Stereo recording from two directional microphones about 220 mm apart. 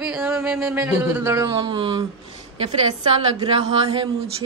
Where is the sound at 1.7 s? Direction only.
20° right (ahead or behind).